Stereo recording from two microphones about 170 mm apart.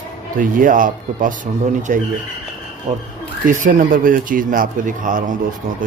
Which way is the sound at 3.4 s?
50° right (ahead or behind).